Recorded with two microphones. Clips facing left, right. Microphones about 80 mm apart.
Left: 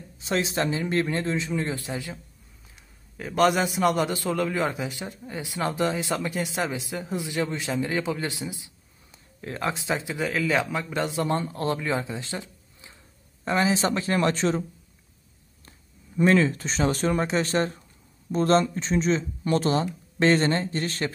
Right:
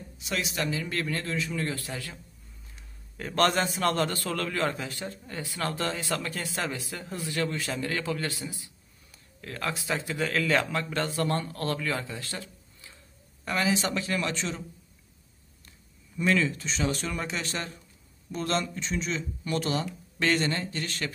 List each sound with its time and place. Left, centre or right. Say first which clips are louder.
0.2 s a man's voice: left 6 dB; left
3.2 s a man's voice: left 3 dB; centre; by 14.6 s left
16.2 s speech: left 6 dB; left